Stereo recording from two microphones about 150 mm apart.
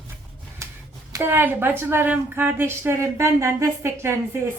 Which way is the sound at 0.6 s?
20° right (ahead or behind).